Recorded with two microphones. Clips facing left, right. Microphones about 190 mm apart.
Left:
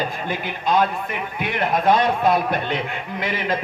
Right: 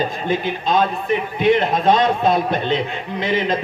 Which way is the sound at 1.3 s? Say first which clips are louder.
Right 6 dB; 25° right (ahead or behind).